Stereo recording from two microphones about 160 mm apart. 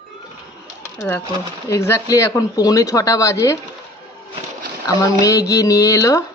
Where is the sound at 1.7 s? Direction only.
15° left (ahead or behind).